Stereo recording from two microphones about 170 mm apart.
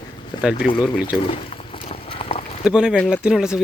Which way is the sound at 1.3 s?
30° left (ahead or behind).